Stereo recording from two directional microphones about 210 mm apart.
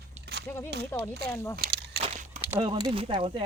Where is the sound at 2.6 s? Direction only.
25° right (ahead or behind).